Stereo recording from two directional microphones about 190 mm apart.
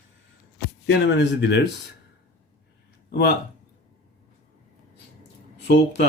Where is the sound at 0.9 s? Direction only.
70° left (ahead or behind).